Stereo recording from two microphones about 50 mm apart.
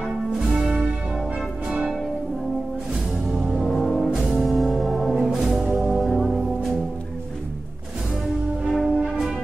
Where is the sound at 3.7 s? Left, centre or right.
Centre.